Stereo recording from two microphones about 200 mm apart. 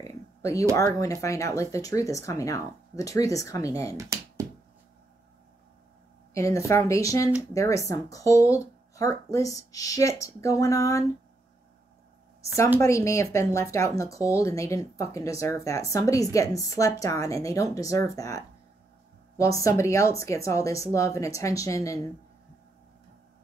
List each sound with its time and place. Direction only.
0.0 s a sound: 15° left (ahead or behind)
0.9 s speech: 15° left (ahead or behind)
3.9 s a sound: 15° right (ahead or behind)
6.3 s speech: 15° left (ahead or behind)
12.8 s speech: 15° left (ahead or behind)
19.4 s speech: 15° left (ahead or behind)